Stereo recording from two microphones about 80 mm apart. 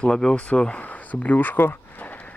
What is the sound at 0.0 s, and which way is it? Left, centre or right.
Speech, centre.